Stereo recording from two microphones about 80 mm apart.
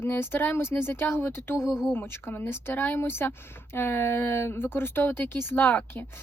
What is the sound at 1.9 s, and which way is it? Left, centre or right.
Speech, left.